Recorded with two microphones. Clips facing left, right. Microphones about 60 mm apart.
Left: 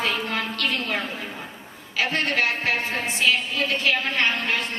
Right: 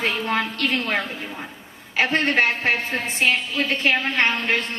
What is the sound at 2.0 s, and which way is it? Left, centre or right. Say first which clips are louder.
A woman's voice: right 4 dB; right.